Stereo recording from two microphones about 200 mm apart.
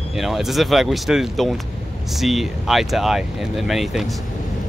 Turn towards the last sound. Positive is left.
turn(degrees=0)  # may be behind; listen again after turning